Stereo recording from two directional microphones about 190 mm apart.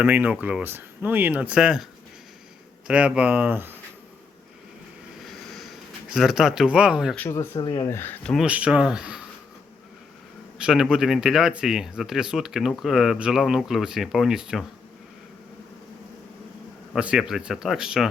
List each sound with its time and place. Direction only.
0.0 s speech: 10° right (ahead or behind)
5.2 s a sound: centre (ahead or behind)
7.2 s speech: 15° left (ahead or behind); by 9.2 s 5° right (ahead or behind)
10.6 s speech: 5° right (ahead or behind)
16.9 s speech: 5° right (ahead or behind)